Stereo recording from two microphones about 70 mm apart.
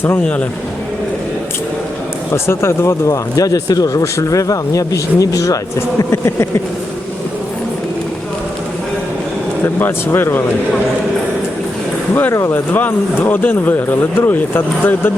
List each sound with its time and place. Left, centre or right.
2.3 s speech: left
6.1 s a sound: left
10.1 s speech: left
12.3 s speech: left